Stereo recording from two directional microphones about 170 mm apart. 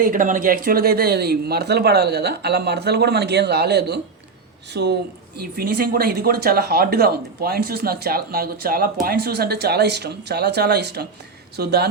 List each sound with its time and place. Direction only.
0.0 s speech: 50° right (ahead or behind); by 4.9 s 85° right
5.4 s speech: 65° right (ahead or behind)